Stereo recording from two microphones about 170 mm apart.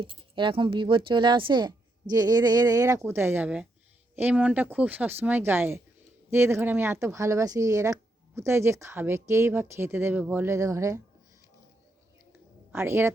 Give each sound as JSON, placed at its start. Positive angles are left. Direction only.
{"t": 0.0, "sound": "speech", "side_deg": -30}
{"t": 12.7, "sound": "speech", "side_deg": -15}